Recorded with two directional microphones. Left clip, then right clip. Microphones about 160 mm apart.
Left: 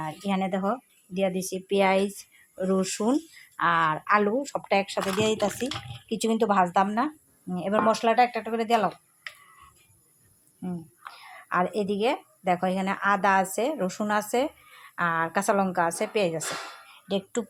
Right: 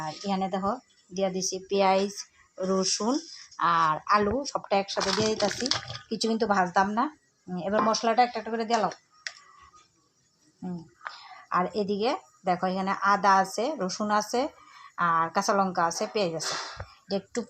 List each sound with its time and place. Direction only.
0.0 s a woman's voice: 15° left (ahead or behind)
10.6 s a woman's voice: 10° left (ahead or behind)